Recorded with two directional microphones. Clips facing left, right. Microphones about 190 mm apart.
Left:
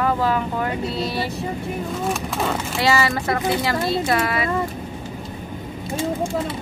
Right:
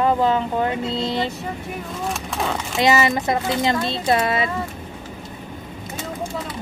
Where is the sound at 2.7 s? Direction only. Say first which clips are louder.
Right 3 dB; 20° right (ahead or behind).